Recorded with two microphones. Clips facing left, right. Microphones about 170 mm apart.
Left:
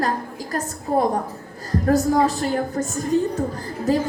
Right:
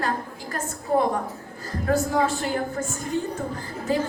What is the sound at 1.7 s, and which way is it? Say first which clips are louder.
A woman's voice: left 5 dB; 35° left (ahead or behind).